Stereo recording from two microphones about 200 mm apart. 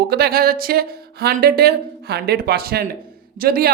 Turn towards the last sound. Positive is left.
turn(degrees=-50)  # may be behind; listen again after turning